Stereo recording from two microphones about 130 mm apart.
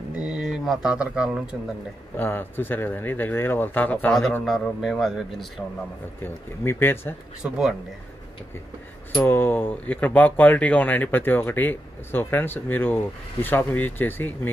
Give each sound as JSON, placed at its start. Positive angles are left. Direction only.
{"t": 0.1, "sound": "speech", "side_deg": -5}
{"t": 2.1, "sound": "speech", "side_deg": 15}
{"t": 6.2, "sound": "speech", "side_deg": 20}
{"t": 7.4, "sound": "speech", "side_deg": -10}
{"t": 9.2, "sound": "speech", "side_deg": 15}